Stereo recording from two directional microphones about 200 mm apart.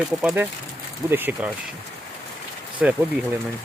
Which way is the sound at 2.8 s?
5° right (ahead or behind).